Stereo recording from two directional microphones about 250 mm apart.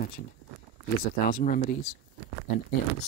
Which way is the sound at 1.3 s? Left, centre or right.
Left.